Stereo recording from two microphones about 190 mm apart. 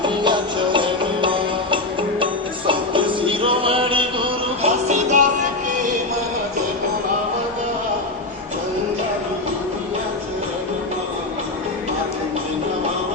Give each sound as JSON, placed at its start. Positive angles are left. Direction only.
{"t": 0.0, "sound": "music", "side_deg": -25}